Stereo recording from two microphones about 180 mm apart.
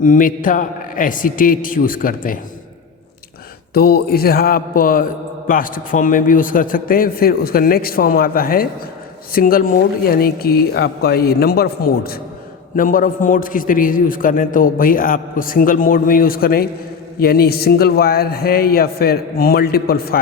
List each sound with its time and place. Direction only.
0.0 s a man's voice: 50° left (ahead or behind)
3.8 s a man's voice: 60° left (ahead or behind)